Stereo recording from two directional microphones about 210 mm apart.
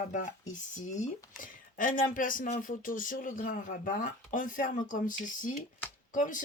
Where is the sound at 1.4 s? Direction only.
40° left (ahead or behind).